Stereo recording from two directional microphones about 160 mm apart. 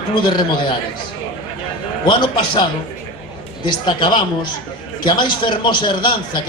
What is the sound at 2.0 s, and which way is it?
Speech, 25° left (ahead or behind).